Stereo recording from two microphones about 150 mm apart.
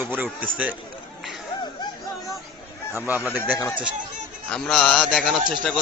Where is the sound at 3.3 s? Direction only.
15° right (ahead or behind).